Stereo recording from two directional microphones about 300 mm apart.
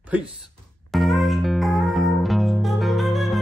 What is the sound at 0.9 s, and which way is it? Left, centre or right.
Music, centre.